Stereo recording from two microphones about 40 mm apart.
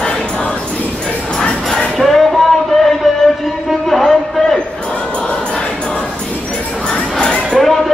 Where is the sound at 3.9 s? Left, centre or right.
Centre.